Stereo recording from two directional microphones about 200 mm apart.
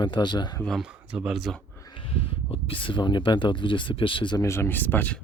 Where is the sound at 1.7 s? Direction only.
20° left (ahead or behind).